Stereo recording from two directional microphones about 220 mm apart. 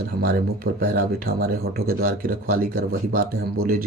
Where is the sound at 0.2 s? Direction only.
40° right (ahead or behind).